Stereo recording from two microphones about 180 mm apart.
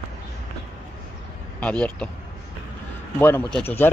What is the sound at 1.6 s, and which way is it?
Speech, 5° left (ahead or behind).